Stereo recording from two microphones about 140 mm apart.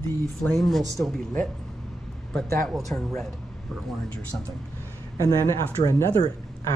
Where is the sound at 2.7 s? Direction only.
Centre (ahead or behind).